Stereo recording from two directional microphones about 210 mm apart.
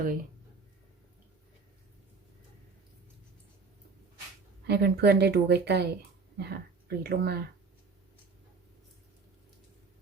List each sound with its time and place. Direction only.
4.6 s a woman's voice: 50° right (ahead or behind)